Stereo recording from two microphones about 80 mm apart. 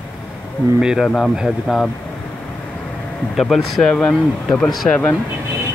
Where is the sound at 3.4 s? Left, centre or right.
Centre.